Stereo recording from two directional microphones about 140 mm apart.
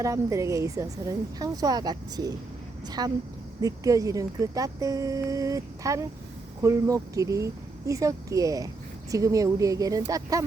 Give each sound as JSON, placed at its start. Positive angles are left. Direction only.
{"t": 0.0, "sound": "speech", "side_deg": -25}